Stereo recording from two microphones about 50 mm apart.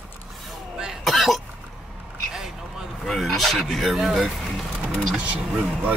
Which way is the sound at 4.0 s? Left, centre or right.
Centre.